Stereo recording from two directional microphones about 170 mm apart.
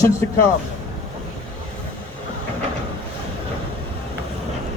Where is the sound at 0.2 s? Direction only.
15° left (ahead or behind).